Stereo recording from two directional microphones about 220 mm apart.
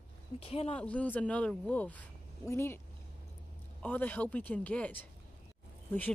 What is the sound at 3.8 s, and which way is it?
Speech, 10° left (ahead or behind).